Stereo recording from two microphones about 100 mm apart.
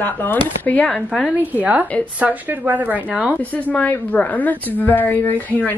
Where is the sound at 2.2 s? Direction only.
15° right (ahead or behind).